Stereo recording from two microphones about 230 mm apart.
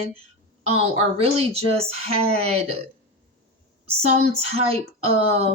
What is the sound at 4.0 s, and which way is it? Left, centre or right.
Speech, right.